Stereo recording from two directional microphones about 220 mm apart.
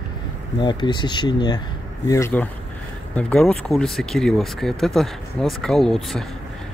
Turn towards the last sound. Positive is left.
turn(degrees=0)  # may be behind; listen again after turning